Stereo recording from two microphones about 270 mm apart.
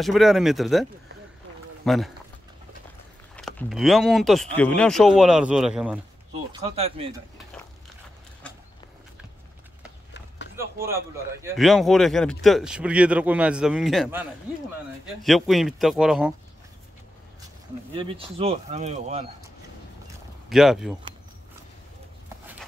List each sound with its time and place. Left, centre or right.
0.0 s speech: centre
1.9 s speech: centre
3.3 s speech: centre
6.5 s speech: right
10.5 s a sound: centre
11.4 s speech: centre
15.2 s speech: centre
17.9 s speech: centre
20.1 s a sound: centre